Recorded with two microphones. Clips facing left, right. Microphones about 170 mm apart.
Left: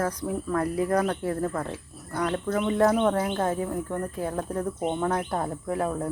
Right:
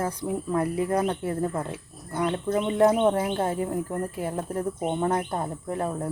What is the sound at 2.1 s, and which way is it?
Speech, 25° right (ahead or behind).